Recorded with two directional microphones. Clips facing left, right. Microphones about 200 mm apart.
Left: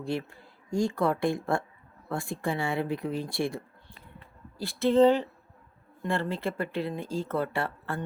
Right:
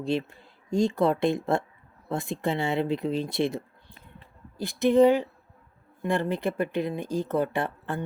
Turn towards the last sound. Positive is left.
turn(degrees=-20)  # may be behind; listen again after turning